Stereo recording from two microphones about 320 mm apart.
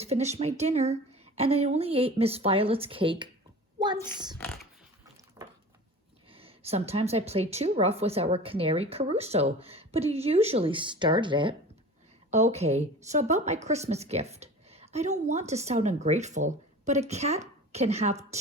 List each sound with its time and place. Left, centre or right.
0.0 s a woman's voice: centre
6.3 s a woman's voice: centre